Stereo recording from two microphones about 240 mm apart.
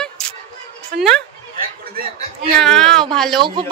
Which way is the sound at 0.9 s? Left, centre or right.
Right.